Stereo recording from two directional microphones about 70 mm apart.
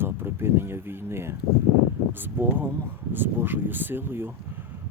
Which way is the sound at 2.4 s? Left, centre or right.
Right.